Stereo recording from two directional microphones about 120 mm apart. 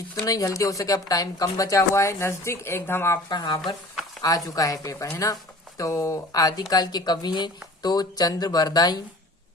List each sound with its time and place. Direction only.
0.3 s speech: 30° left (ahead or behind)
3.2 s speech: 35° left (ahead or behind)